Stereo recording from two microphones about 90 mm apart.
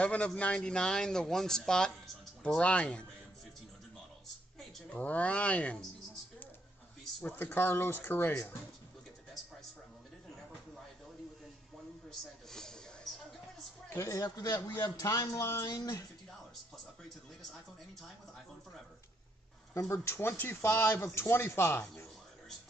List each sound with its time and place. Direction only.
0.0 s speech: 15° left (ahead or behind)
4.9 s speech: 15° left (ahead or behind)
7.5 s speech: 20° left (ahead or behind)
12.1 s a sound: 5° left (ahead or behind)
13.8 s speech: 35° left (ahead or behind)
19.7 s speech: 35° left (ahead or behind)